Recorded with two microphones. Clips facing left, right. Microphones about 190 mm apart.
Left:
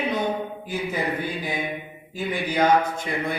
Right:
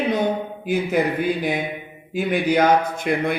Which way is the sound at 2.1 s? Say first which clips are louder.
Right 6 dB; 75° right (ahead or behind).